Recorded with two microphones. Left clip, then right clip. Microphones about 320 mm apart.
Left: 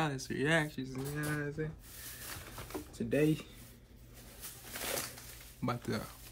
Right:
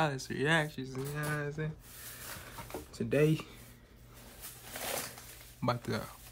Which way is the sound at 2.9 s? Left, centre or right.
Centre.